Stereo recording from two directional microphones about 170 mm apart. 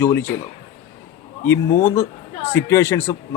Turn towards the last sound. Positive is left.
turn(degrees=15)  # may be behind; listen again after turning